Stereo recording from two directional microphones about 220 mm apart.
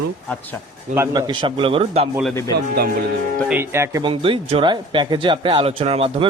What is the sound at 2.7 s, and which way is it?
Speech, 45° right (ahead or behind).